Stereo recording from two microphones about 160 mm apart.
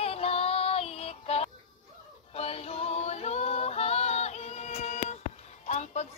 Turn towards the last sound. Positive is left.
turn(degrees=45)  # may be behind; listen again after turning